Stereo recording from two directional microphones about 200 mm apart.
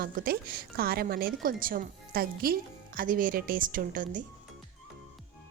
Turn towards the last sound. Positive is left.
turn(degrees=-45)  # may be behind; listen again after turning